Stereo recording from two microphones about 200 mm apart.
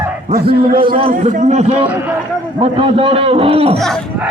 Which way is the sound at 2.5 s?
25° right (ahead or behind).